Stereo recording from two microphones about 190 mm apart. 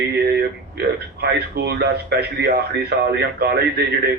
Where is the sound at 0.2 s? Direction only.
55° right (ahead or behind).